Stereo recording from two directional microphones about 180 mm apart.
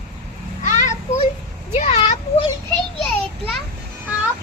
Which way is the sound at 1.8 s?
40° left (ahead or behind).